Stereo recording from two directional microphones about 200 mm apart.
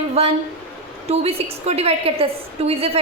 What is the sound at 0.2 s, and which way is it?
A woman's voice, 30° right (ahead or behind).